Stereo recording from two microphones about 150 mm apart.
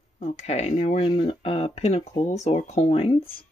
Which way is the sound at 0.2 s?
45° left (ahead or behind).